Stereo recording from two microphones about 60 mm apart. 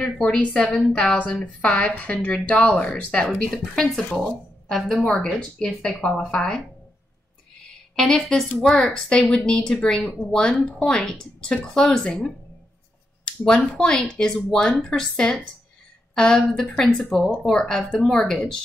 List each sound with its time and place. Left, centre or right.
0.0 s a woman's voice: centre
0.7 s a woman's voice: centre
0.9 s a woman's voice: left
3.1 s a woman's voice: centre
7.9 s speech: centre
13.7 s speech: centre